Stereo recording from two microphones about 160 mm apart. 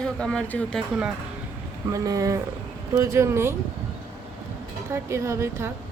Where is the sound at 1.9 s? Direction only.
20° right (ahead or behind).